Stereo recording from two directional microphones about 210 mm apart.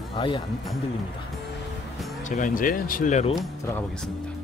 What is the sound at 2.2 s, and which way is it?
Speech, 35° left (ahead or behind).